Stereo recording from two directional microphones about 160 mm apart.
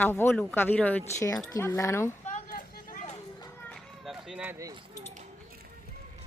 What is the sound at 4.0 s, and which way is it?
Run, centre (ahead or behind).